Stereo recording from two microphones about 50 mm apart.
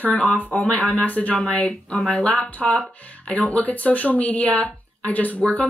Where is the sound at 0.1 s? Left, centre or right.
Left.